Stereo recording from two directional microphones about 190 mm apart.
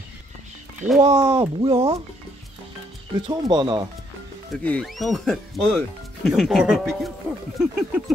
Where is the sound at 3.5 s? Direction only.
25° right (ahead or behind).